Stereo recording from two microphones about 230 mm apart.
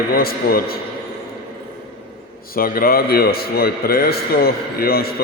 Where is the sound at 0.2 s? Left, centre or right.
Left.